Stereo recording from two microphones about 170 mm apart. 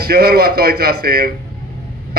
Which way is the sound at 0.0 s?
65° right (ahead or behind).